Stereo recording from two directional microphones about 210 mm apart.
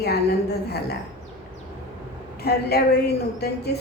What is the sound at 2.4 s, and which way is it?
A woman's voice, 50° left (ahead or behind).